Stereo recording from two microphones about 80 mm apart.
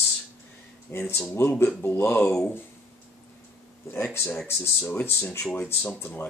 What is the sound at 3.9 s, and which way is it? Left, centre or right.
Speech, left.